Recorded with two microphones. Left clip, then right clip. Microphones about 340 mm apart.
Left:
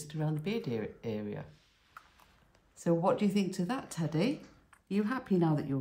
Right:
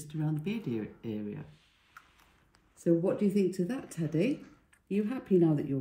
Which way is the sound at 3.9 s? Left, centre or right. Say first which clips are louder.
Right 4 dB; left.